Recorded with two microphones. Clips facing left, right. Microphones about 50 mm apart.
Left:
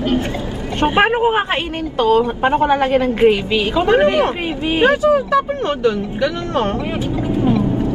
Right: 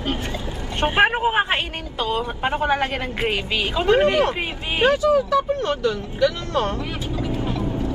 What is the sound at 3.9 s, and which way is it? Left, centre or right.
Speech, left.